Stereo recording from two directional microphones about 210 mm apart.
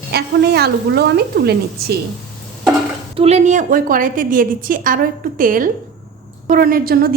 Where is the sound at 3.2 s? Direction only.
30° right (ahead or behind).